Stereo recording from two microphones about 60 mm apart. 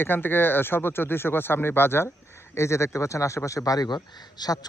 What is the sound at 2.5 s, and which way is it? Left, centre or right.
Speech, left.